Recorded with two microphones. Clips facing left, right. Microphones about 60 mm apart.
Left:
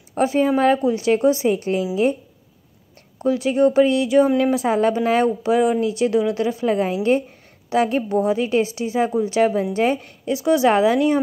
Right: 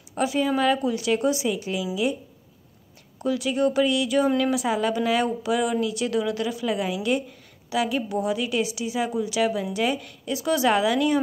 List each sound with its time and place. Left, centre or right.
0.1 s speech: left
3.2 s speech: left